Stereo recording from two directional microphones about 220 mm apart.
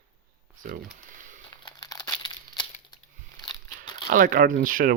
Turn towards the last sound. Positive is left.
turn(degrees=-40)  # may be behind; listen again after turning